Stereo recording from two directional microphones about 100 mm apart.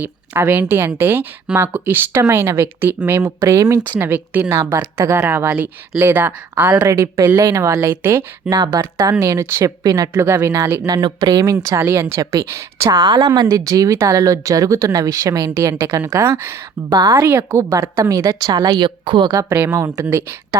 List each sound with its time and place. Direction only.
0.0 s speech: 20° right (ahead or behind)
3.9 s speech: 20° right (ahead or behind)
6.8 s a woman's voice: 30° right (ahead or behind)
8.4 s a woman's voice: 40° right (ahead or behind)
10.1 s speech: 25° right (ahead or behind)
10.8 s speech: 45° right (ahead or behind)
11.8 s a woman's voice: 25° right (ahead or behind); by 19.3 s 55° right (ahead or behind)
19.3 s a woman's voice: 35° right (ahead or behind)
19.5 s speech: 20° right (ahead or behind)